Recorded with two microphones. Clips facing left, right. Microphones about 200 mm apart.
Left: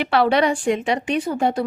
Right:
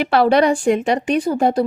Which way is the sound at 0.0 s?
40° right (ahead or behind).